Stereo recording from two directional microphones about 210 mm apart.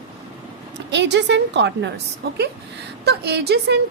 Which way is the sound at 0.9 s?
55° right (ahead or behind).